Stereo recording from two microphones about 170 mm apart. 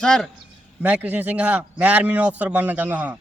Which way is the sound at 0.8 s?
10° right (ahead or behind).